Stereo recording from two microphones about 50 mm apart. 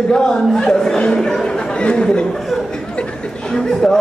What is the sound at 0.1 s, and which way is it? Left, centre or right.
Speech, centre.